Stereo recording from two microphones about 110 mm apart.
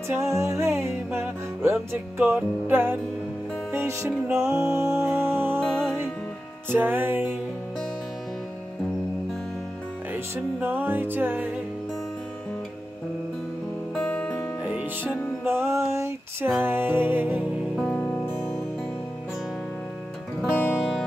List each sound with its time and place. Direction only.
0.1 s music: 25° right (ahead or behind)
4.1 s music: 5° right (ahead or behind)
4.6 s music: 25° right (ahead or behind)
6.7 s music: 20° right (ahead or behind)
10.1 s music: 15° right (ahead or behind)
13.9 s music: 15° left (ahead or behind)
14.6 s music: 10° right (ahead or behind)
15.4 s music: 20° right (ahead or behind)
17.7 s music: 10° left (ahead or behind)
20.4 s music: 20° left (ahead or behind)
20.7 s music: centre (ahead or behind)